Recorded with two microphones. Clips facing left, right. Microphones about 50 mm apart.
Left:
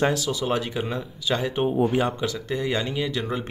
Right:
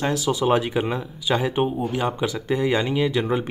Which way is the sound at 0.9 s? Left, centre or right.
Centre.